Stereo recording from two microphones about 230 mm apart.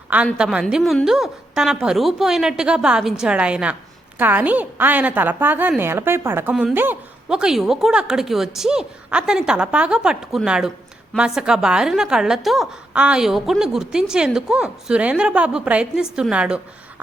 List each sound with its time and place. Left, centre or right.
0.3 s a woman's voice: centre